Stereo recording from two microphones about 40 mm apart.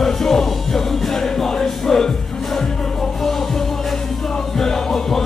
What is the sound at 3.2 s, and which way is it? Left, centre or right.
Music, centre.